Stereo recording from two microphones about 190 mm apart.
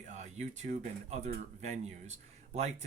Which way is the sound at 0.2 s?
40° right (ahead or behind).